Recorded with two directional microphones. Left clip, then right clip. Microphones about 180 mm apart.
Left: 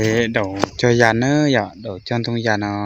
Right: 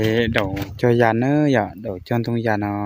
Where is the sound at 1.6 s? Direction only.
25° right (ahead or behind).